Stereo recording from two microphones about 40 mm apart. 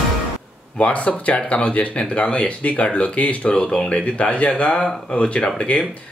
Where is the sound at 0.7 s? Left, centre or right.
Left.